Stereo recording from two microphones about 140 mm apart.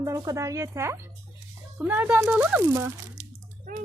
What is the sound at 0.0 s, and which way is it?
A woman's voice, 20° right (ahead or behind).